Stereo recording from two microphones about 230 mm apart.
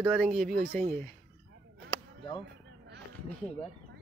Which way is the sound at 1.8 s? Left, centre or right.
Centre.